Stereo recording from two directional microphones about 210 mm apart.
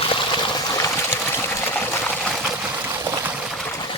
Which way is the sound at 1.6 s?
10° left (ahead or behind).